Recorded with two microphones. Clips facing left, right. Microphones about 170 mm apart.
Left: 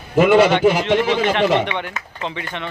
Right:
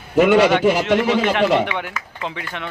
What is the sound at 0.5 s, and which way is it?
A man's voice, 5° right (ahead or behind).